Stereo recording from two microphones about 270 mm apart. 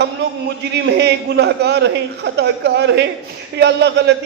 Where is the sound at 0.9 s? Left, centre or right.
Right.